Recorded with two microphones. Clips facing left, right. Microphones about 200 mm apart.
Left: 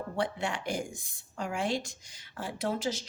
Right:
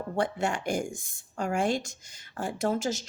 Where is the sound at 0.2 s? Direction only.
45° right (ahead or behind).